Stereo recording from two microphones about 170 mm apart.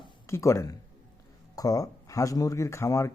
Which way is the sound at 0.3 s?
15° left (ahead or behind).